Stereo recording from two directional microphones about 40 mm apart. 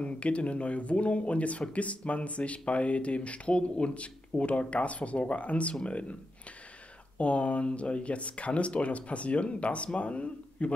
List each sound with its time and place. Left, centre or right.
0.0 s speech: left
7.2 s speech: left